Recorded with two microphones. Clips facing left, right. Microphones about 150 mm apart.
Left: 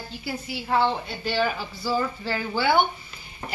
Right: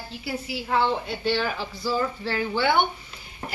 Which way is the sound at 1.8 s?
5° left (ahead or behind).